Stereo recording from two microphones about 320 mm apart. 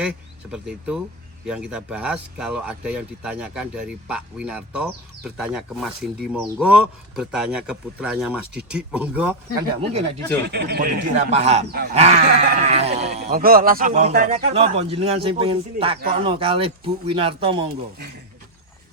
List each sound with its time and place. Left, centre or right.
0.5 s speech: centre
10.5 s speech: right